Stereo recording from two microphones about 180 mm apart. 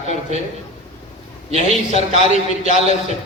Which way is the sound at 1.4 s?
35° right (ahead or behind).